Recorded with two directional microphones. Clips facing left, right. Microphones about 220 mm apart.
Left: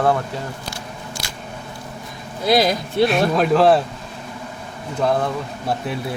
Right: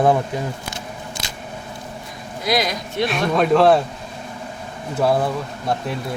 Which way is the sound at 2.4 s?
30° left (ahead or behind).